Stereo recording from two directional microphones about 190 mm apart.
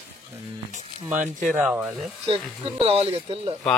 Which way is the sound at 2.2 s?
30° right (ahead or behind).